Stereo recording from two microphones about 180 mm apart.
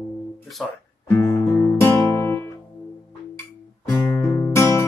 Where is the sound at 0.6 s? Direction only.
Centre (ahead or behind).